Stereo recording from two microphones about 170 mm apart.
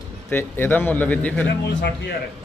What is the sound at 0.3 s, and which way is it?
A man's voice, 10° left (ahead or behind).